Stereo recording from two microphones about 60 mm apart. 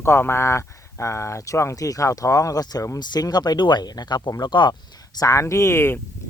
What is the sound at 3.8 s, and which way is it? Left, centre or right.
Speech, left.